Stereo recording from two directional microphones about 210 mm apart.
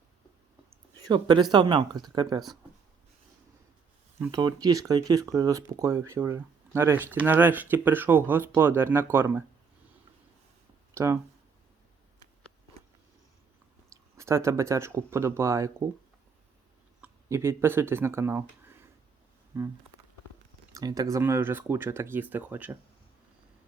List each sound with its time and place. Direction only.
1.0 s speech: 20° right (ahead or behind)
4.2 s speech: 20° right (ahead or behind)
10.9 s speech: 15° right (ahead or behind)
14.2 s speech: 15° right (ahead or behind)
17.0 s speech: 15° right (ahead or behind)
20.7 s speech: 15° right (ahead or behind)